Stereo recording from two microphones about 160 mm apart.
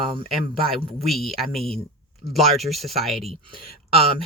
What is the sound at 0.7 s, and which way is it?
Speech, centre (ahead or behind).